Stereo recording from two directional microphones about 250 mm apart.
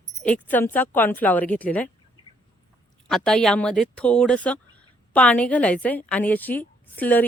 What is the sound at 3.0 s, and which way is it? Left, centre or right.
A woman's voice, centre.